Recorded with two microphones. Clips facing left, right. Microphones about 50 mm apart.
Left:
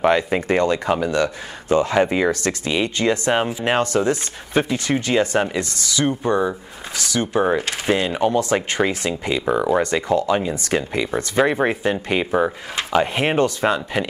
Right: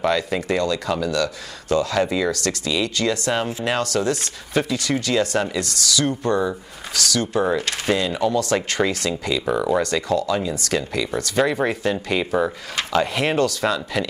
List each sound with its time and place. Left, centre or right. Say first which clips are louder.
0.0 s speech: left 4 dB; left